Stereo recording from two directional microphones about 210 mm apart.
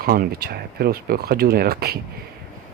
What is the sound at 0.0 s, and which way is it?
Speech, 45° right (ahead or behind).